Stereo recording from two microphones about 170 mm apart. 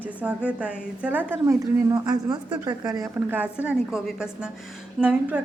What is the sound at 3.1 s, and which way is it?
A woman's voice, 10° right (ahead or behind).